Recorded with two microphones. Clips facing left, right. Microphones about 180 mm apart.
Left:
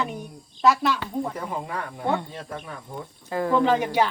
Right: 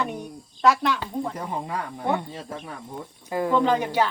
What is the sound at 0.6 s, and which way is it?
Speech, 5° left (ahead or behind).